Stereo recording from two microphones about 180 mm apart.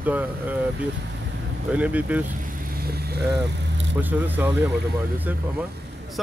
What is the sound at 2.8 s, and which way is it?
Speech, 60° right (ahead or behind).